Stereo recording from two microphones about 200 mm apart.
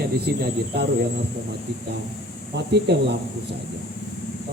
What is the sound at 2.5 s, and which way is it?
Speech, 55° right (ahead or behind).